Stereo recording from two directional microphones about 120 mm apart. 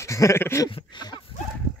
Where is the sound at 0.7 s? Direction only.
45° left (ahead or behind).